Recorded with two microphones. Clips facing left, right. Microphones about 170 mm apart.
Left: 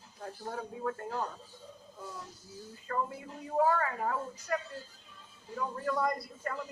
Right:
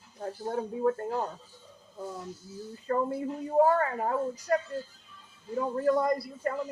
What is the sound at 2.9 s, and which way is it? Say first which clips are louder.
A woman's voice: right 7 dB; 35° right (ahead or behind).